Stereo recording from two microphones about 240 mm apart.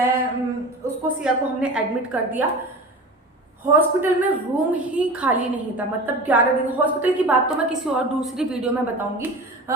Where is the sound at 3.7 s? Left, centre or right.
Centre.